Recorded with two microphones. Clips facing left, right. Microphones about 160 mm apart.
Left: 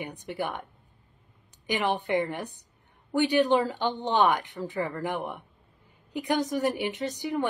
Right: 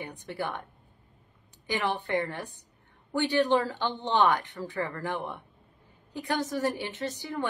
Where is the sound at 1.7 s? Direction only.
15° left (ahead or behind).